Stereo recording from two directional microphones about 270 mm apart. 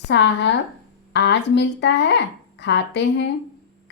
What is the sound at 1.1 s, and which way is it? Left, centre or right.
A woman's voice, left.